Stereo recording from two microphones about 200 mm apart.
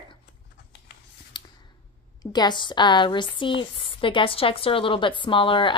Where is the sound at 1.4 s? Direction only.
20° left (ahead or behind).